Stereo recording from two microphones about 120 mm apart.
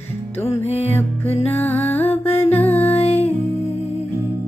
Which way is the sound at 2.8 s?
55° left (ahead or behind).